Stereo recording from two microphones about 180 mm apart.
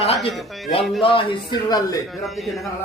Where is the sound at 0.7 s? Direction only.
30° left (ahead or behind).